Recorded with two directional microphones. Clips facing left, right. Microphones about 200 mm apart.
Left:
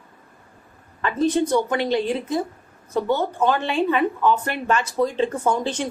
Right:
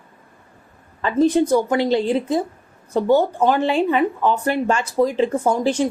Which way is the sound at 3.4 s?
15° right (ahead or behind).